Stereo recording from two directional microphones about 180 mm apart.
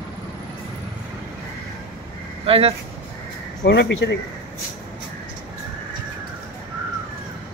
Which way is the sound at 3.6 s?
75° left (ahead or behind).